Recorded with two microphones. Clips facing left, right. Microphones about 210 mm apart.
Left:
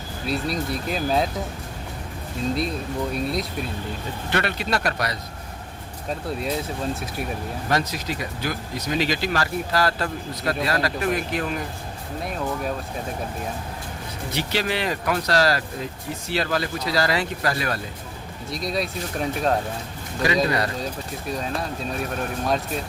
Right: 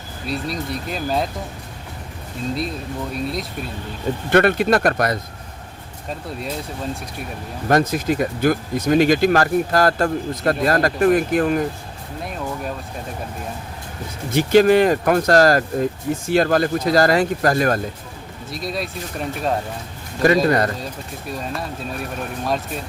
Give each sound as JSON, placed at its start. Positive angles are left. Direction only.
{"t": 0.3, "sound": "speech", "side_deg": 0}
{"t": 2.6, "sound": "speech", "side_deg": 0}
{"t": 4.3, "sound": "speech", "side_deg": -50}
{"t": 6.1, "sound": "speech", "side_deg": 0}
{"t": 7.7, "sound": "speech", "side_deg": -50}
{"t": 14.3, "sound": "speech", "side_deg": -50}
{"t": 18.5, "sound": "speech", "side_deg": 0}
{"t": 20.2, "sound": "speech", "side_deg": -50}
{"t": 21.3, "sound": "speech", "side_deg": 0}